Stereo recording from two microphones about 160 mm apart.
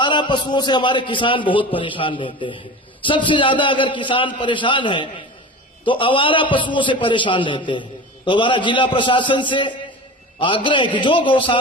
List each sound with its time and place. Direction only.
0.0 s a man's voice: 30° left (ahead or behind)